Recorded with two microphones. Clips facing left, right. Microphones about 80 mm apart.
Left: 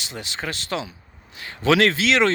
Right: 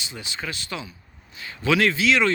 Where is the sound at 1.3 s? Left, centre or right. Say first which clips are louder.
Left 1 dB; left.